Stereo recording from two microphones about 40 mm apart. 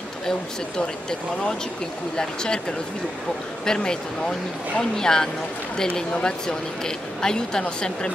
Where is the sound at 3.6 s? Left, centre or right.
Centre.